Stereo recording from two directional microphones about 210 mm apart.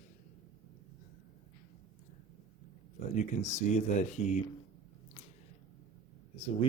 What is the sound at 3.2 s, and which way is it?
Speech, 35° left (ahead or behind).